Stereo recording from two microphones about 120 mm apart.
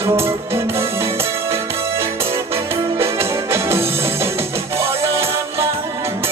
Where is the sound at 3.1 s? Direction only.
20° right (ahead or behind).